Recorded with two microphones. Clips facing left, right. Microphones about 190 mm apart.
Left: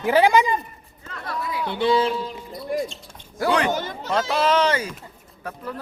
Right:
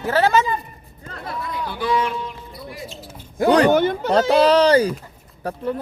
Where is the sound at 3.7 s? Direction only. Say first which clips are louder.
Right 10 dB; 60° right (ahead or behind).